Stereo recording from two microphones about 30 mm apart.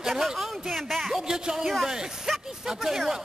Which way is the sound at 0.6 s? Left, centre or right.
Centre.